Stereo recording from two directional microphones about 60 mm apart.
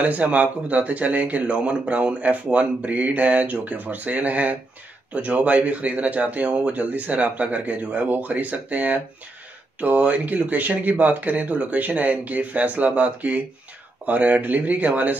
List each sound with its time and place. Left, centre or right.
0.0 s speech: right